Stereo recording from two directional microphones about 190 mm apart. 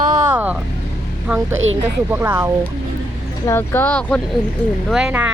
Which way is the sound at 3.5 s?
10° left (ahead or behind).